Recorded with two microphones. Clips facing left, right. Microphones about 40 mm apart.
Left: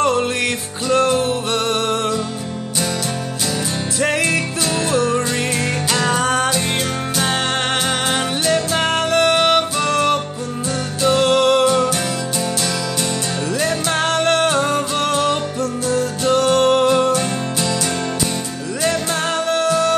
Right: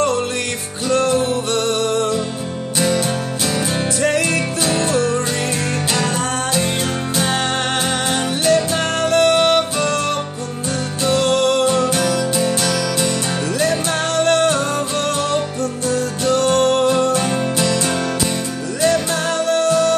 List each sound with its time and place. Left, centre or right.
0.8 s music: centre
4.0 s music: centre
8.5 s music: centre
11.1 s music: centre
13.6 s music: centre
19.5 s music: centre